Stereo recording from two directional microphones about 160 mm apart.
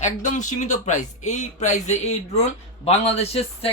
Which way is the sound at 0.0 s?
50° left (ahead or behind).